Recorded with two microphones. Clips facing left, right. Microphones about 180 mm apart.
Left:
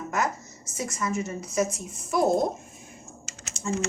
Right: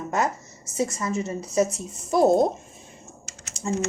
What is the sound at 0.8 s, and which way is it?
A woman's voice, 35° right (ahead or behind).